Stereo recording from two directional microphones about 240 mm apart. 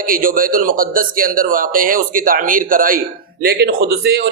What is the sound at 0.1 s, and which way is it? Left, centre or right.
Speech, right.